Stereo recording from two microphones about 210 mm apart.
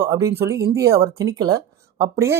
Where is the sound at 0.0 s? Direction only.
15° right (ahead or behind).